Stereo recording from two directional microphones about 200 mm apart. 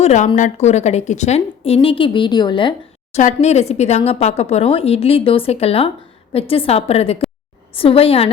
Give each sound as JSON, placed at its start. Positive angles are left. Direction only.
{"t": 0.0, "sound": "a woman's voice", "side_deg": 35}
{"t": 3.2, "sound": "a woman's voice", "side_deg": 35}